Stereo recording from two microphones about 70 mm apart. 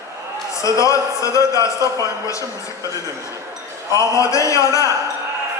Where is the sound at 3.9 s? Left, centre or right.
Left.